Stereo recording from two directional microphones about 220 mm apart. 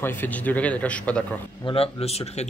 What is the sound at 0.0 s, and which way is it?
Speech, 10° left (ahead or behind).